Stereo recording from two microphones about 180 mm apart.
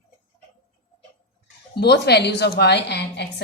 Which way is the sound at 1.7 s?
70° left (ahead or behind).